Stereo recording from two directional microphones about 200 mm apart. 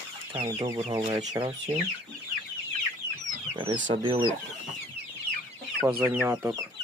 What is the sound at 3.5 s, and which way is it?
Speech, 25° right (ahead or behind).